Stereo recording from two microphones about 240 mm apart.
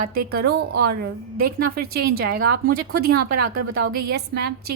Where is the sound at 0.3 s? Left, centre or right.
Right.